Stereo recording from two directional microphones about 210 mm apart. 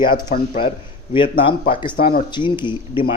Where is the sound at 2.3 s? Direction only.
20° left (ahead or behind).